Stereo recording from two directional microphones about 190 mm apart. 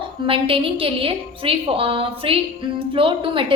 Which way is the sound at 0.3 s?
30° right (ahead or behind).